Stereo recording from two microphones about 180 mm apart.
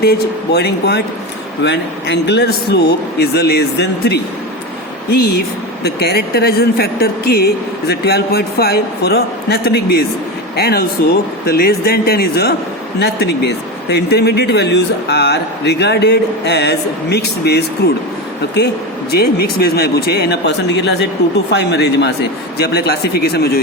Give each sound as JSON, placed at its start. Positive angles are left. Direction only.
{"t": 0.0, "sound": "speech", "side_deg": 65}
{"t": 19.1, "sound": "speech", "side_deg": 60}